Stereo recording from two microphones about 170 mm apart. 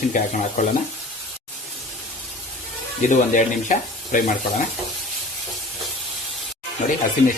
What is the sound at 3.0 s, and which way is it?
Speech, 50° left (ahead or behind).